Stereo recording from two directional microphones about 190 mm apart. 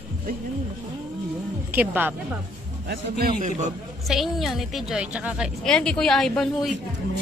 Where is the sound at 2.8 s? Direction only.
55° right (ahead or behind).